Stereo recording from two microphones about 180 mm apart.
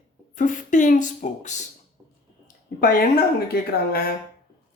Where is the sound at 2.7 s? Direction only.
60° left (ahead or behind).